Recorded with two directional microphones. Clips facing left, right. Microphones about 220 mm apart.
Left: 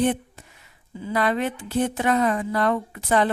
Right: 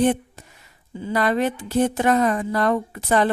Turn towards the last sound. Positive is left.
turn(degrees=-40)  # may be behind; listen again after turning